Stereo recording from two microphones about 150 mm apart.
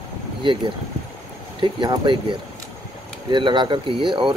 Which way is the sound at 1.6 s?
30° right (ahead or behind).